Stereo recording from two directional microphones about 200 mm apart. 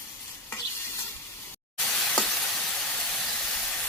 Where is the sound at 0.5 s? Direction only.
15° left (ahead or behind).